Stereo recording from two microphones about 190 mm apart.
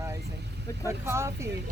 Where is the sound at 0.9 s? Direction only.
15° right (ahead or behind).